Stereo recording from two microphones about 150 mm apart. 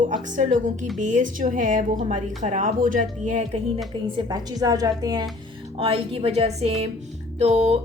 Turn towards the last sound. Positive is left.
turn(degrees=-45)  # may be behind; listen again after turning